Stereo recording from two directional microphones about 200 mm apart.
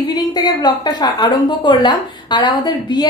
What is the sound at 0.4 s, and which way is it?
A woman's voice, 20° left (ahead or behind).